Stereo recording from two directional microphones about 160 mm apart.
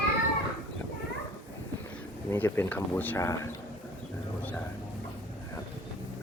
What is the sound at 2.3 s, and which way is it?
Speech, 15° left (ahead or behind).